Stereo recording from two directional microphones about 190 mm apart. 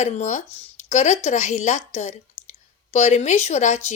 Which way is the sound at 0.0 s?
40° left (ahead or behind).